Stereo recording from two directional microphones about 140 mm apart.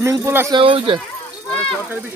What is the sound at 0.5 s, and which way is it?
Speech, 40° right (ahead or behind).